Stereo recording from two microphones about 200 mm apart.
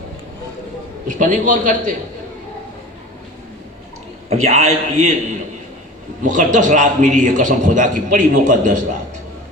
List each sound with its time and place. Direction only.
1.0 s a man's voice: 40° right (ahead or behind)
4.3 s a man's voice: 35° right (ahead or behind)
6.2 s a man's voice: 40° right (ahead or behind)